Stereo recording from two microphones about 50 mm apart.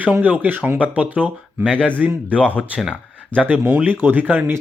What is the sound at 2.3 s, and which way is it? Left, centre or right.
Speech, right.